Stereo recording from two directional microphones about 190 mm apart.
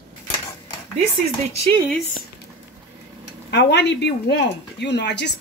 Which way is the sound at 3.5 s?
65° left (ahead or behind).